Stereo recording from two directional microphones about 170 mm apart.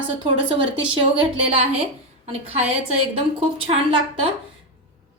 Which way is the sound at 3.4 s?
35° right (ahead or behind).